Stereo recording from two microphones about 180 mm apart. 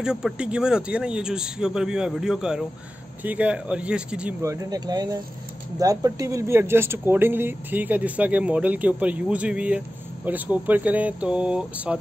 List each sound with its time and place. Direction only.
0.0 s a man's voice: 5° right (ahead or behind)
4.4 s speech: 15° right (ahead or behind)